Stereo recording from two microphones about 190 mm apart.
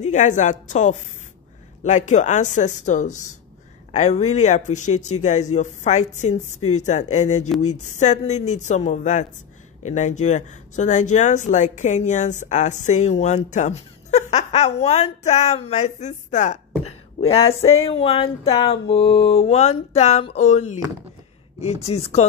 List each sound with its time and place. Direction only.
0.0 s speech: 40° left (ahead or behind)